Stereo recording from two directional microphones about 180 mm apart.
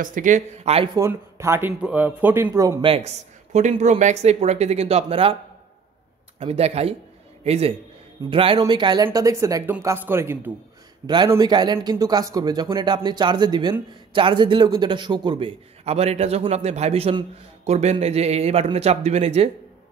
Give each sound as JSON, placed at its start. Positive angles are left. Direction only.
{"t": 0.0, "sound": "speech", "side_deg": -45}
{"t": 0.9, "sound": "speech", "side_deg": -15}
{"t": 2.9, "sound": "speech", "side_deg": -35}
{"t": 6.4, "sound": "a man's voice", "side_deg": -35}